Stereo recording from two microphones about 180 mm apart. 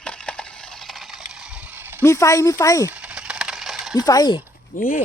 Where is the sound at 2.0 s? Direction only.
15° left (ahead or behind).